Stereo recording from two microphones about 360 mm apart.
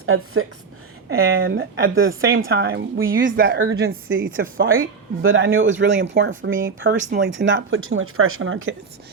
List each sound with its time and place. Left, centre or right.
0.0 s a woman's voice: right